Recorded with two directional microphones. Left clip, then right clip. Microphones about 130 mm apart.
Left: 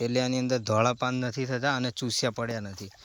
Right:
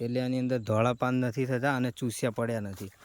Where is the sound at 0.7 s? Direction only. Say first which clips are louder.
Left 1 dB; 30° right (ahead or behind).